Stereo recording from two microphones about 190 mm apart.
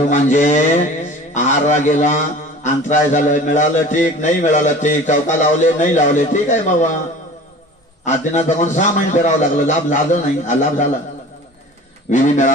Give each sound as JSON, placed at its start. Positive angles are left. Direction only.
{"t": 0.1, "sound": "mantra", "side_deg": 40}
{"t": 1.3, "sound": "a man's voice", "side_deg": 40}
{"t": 8.0, "sound": "a man's voice", "side_deg": 40}
{"t": 12.1, "sound": "a man's voice", "side_deg": 40}